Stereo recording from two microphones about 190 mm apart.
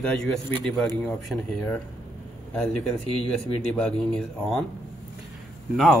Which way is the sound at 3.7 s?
5° left (ahead or behind).